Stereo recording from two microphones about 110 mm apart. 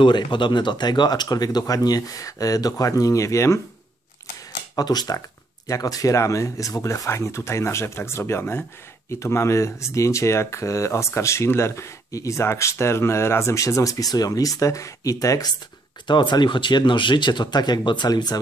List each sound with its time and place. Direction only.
0.0 s speech: 45° left (ahead or behind); by 3.6 s 25° left (ahead or behind)
4.7 s speech: 35° left (ahead or behind)
16.1 s speech: 45° left (ahead or behind)